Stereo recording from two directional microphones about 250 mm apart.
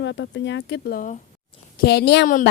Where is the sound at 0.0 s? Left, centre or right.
Left.